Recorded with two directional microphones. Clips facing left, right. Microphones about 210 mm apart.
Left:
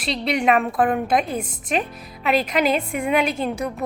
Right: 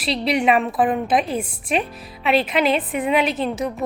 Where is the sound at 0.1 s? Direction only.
5° right (ahead or behind).